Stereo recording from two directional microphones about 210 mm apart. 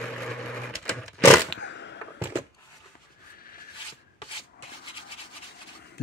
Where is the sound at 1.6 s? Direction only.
55° left (ahead or behind).